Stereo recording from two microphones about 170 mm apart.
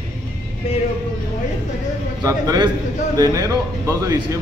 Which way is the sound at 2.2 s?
20° right (ahead or behind).